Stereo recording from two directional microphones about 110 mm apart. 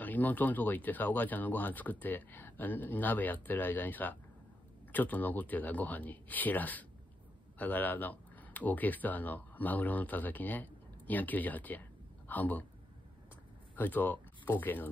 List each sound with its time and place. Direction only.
0.0 s speech: 15° left (ahead or behind)
13.7 s speech: 15° left (ahead or behind)